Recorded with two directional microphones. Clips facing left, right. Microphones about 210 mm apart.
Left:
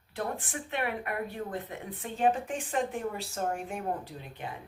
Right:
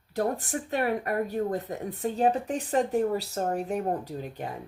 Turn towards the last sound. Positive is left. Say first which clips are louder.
# right 6 dB
turn(degrees=-40)  # may be behind; listen again after turning